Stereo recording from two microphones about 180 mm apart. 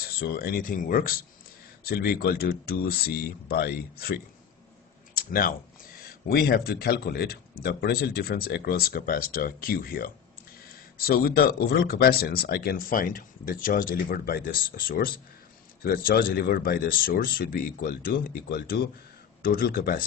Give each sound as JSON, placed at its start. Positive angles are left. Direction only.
{"t": 0.0, "sound": "speech", "side_deg": 60}